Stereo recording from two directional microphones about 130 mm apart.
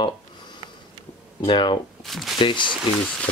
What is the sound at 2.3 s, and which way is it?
Speech, 40° left (ahead or behind).